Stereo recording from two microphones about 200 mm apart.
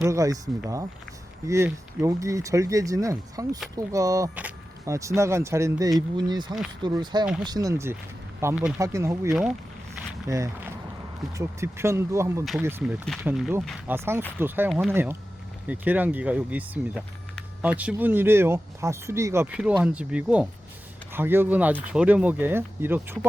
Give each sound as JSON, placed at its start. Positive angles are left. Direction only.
{"t": 0.0, "sound": "speech", "side_deg": -15}
{"t": 9.3, "sound": "speech", "side_deg": 0}
{"t": 10.2, "sound": "speech", "side_deg": -15}